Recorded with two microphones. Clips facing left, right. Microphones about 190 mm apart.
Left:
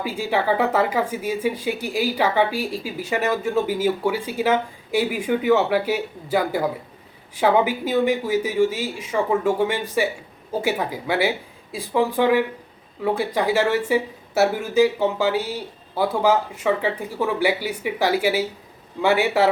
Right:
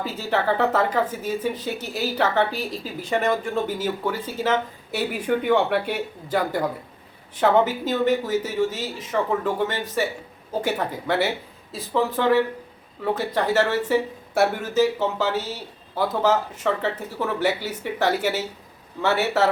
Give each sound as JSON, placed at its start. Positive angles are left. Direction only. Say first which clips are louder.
{"t": 0.0, "sound": "speech", "louder": "left 1 dB", "side_deg": 10}